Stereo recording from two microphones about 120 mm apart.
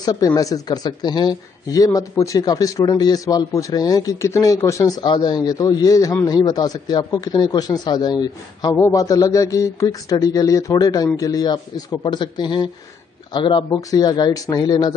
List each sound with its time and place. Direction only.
0.0 s speech: 35° left (ahead or behind)
13.7 s speech: 30° left (ahead or behind)